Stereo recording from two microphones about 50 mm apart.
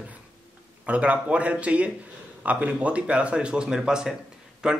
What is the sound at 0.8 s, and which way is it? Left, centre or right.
A man's voice, right.